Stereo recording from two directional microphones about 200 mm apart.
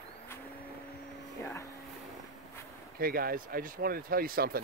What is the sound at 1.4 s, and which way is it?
Speech, 15° left (ahead or behind).